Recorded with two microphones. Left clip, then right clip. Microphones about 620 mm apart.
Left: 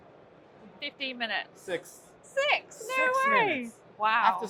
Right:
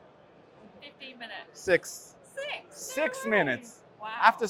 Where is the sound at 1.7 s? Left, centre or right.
Right.